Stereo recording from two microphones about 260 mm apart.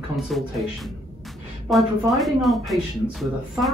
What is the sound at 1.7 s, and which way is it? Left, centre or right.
Speech, centre.